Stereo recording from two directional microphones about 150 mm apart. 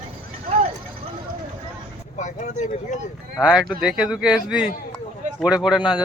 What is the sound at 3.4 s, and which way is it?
Speech, 5° right (ahead or behind).